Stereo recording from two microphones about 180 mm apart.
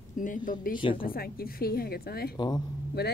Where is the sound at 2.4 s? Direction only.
25° left (ahead or behind).